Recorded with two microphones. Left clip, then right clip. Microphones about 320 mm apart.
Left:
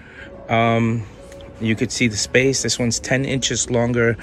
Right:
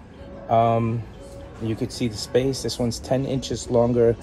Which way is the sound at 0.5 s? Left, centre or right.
Left.